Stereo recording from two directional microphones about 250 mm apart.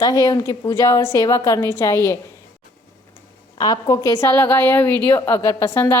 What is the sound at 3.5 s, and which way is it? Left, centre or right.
A woman's voice, centre.